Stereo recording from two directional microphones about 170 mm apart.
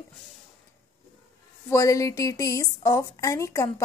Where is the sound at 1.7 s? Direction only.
20° left (ahead or behind).